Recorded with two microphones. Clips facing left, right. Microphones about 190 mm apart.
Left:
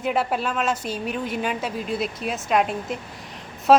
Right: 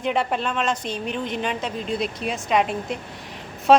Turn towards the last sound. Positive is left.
turn(degrees=0)  # may be behind; listen again after turning